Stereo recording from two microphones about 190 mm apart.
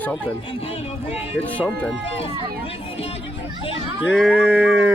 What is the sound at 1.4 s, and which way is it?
Speech, 10° left (ahead or behind).